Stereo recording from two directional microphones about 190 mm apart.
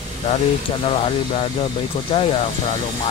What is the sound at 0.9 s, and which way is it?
Speech, 30° left (ahead or behind).